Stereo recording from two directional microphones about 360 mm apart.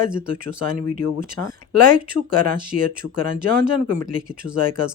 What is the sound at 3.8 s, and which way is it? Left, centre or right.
Speech, right.